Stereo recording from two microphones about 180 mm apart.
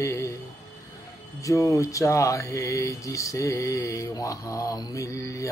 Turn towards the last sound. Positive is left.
turn(degrees=15)  # may be behind; listen again after turning